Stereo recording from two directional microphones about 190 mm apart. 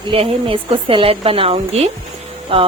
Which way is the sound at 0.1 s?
30° right (ahead or behind).